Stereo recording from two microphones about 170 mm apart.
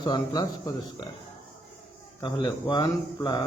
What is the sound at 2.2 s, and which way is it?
A man's voice, 20° left (ahead or behind).